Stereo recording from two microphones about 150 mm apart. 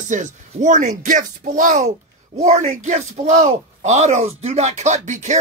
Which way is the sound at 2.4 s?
50° right (ahead or behind).